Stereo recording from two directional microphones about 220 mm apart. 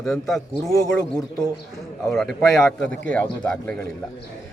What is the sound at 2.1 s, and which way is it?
A man's voice, centre (ahead or behind).